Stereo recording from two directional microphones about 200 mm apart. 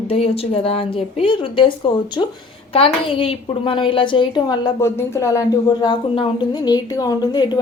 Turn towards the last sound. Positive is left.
turn(degrees=20)  # may be behind; listen again after turning